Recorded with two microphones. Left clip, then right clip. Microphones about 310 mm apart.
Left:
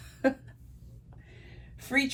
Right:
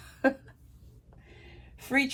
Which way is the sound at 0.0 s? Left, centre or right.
Centre.